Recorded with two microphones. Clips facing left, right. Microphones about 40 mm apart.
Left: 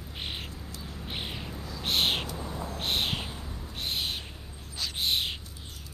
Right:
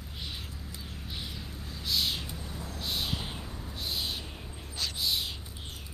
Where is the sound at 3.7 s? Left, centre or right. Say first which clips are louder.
Left 3 dB; left.